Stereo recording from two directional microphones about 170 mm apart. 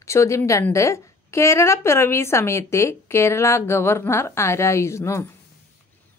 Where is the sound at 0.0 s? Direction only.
15° left (ahead or behind).